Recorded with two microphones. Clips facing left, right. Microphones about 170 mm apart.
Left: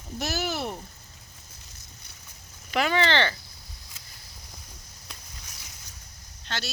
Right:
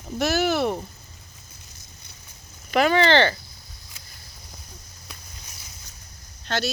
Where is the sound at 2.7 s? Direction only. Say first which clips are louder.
Right 6 dB; 45° right (ahead or behind).